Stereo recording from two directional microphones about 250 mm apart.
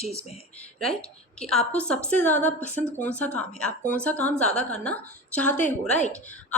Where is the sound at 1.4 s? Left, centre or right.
Centre.